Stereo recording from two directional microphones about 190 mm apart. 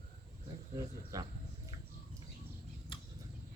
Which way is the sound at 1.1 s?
20° right (ahead or behind).